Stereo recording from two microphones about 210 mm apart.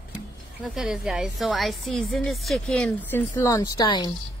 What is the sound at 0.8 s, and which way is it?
A woman's voice, 5° right (ahead or behind).